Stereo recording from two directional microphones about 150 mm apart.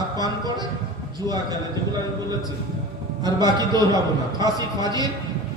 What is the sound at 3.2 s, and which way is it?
A man's voice, 30° right (ahead or behind).